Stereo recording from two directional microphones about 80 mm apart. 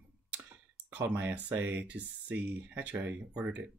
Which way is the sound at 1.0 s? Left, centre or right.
Right.